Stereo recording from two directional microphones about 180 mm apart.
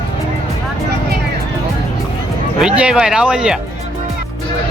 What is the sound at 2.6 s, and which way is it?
Speech, 5° right (ahead or behind).